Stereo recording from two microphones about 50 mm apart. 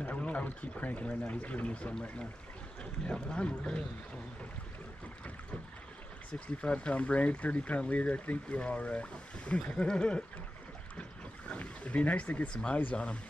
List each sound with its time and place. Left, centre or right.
0.2 s speech: left
6.6 s speech: left
9.8 s a sound: centre
11.0 s speech: left